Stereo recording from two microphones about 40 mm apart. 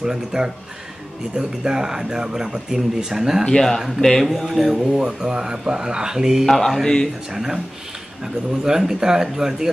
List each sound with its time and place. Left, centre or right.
0.0 s speech: centre
4.0 s speech: centre
4.3 s speech: centre
6.4 s speech: centre
7.3 s speech: centre
8.6 s speech: centre